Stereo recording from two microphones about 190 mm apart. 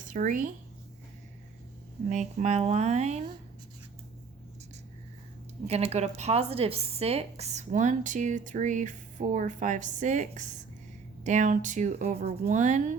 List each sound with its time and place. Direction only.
0.1 s speech: 45° right (ahead or behind)
2.0 s speech: 40° right (ahead or behind)
5.6 s speech: 35° right (ahead or behind)